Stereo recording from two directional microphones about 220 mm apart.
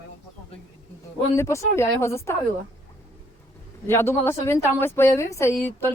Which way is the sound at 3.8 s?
10° left (ahead or behind).